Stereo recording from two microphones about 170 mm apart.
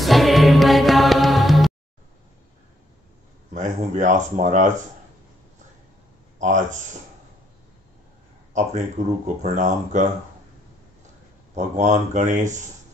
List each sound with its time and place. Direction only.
0.0 s music: centre (ahead or behind)
3.5 s speech: 45° right (ahead or behind)
6.4 s speech: 45° right (ahead or behind)
8.5 s speech: 45° right (ahead or behind)
11.5 s speech: 45° right (ahead or behind)